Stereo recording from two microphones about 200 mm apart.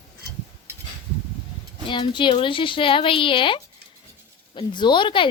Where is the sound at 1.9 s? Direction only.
25° left (ahead or behind).